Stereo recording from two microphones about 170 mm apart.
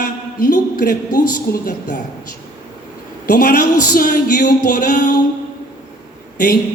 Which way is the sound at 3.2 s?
55° left (ahead or behind).